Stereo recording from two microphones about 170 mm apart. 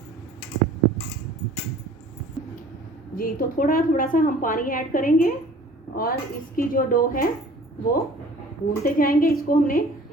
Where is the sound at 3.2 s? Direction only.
55° left (ahead or behind).